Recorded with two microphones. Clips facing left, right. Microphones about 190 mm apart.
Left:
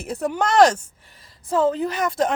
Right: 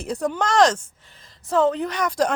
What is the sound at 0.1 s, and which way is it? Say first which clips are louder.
Speech: left 1 dB; 5° left (ahead or behind).